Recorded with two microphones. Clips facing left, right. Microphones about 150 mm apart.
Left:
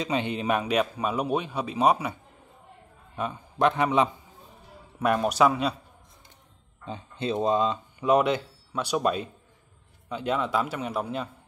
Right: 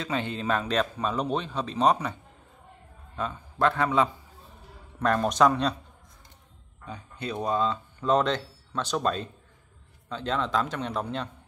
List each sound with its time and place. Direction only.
0.0 s speech: 20° left (ahead or behind)
3.2 s speech: 15° left (ahead or behind)
6.9 s speech: 25° left (ahead or behind); by 11.2 s 10° left (ahead or behind)